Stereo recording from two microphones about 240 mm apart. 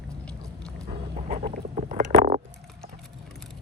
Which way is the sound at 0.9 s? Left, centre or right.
Right.